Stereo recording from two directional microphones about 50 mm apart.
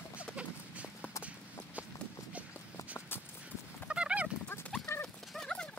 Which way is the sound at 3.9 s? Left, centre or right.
Right.